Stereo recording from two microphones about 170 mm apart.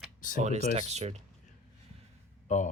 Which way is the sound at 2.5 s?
45° left (ahead or behind).